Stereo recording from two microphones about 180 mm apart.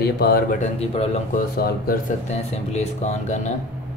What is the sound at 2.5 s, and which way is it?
Speech, 40° left (ahead or behind).